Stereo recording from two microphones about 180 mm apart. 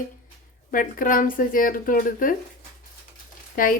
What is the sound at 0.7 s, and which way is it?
A woman's voice, 50° left (ahead or behind).